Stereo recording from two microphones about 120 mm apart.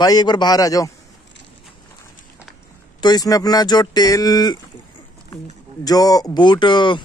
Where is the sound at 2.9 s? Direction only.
35° left (ahead or behind).